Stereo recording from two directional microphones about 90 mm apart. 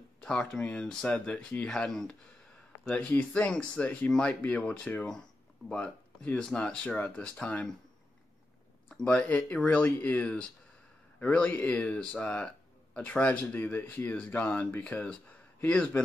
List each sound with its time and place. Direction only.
0.2 s speech: 10° left (ahead or behind)
1.7 s speech: 5° left (ahead or behind)
4.4 s speech: 15° left (ahead or behind)
8.8 s speech: 15° left (ahead or behind)